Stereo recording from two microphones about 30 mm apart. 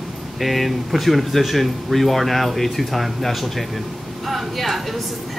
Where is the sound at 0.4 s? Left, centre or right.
Centre.